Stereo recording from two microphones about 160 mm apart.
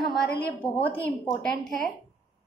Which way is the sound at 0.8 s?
10° left (ahead or behind).